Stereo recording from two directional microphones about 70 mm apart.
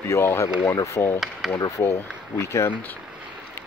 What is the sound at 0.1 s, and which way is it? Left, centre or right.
Speech, left.